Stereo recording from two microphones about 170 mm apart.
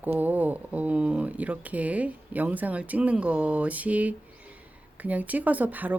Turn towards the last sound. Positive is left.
turn(degrees=-10)  # may be behind; listen again after turning